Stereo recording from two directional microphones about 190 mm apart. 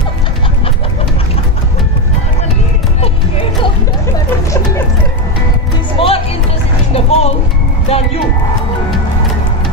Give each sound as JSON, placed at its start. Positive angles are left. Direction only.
{"t": 5.9, "sound": "music", "side_deg": 30}